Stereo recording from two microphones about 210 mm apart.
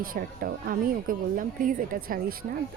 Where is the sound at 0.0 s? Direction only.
40° right (ahead or behind).